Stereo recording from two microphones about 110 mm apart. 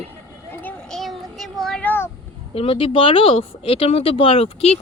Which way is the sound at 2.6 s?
55° left (ahead or behind).